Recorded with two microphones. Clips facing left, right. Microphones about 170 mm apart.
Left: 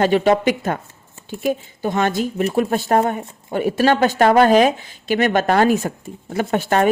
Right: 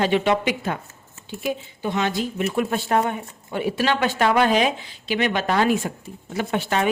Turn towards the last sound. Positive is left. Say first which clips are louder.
# left 5 dB
turn(degrees=45)  # may be behind; listen again after turning